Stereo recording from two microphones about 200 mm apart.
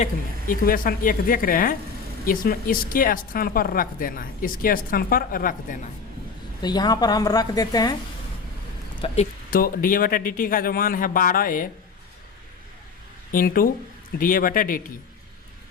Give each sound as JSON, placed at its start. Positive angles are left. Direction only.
{"t": 0.0, "sound": "speech", "side_deg": 45}
{"t": 6.6, "sound": "a woman's voice", "side_deg": 20}
{"t": 9.0, "sound": "a woman's voice", "side_deg": 25}
{"t": 9.5, "sound": "speech", "side_deg": 45}
{"t": 13.3, "sound": "speech", "side_deg": 45}